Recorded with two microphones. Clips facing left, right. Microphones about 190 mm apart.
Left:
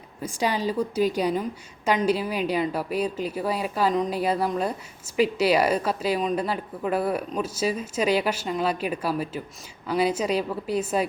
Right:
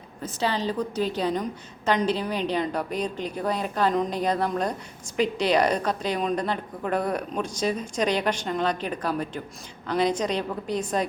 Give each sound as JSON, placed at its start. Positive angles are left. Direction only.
{"t": 0.2, "sound": "a woman's voice", "side_deg": 10}